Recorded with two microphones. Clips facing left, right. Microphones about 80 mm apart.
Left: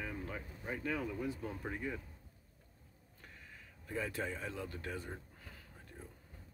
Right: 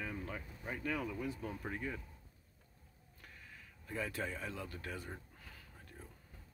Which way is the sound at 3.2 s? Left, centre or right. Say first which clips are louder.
Even; left.